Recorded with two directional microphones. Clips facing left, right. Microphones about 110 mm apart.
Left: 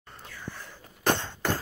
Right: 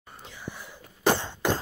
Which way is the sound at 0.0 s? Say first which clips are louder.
Right 1 dB; 15° right (ahead or behind).